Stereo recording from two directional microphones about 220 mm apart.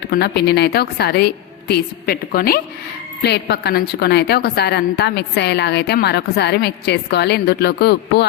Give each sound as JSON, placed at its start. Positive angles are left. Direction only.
{"t": 0.1, "sound": "a woman's voice", "side_deg": 45}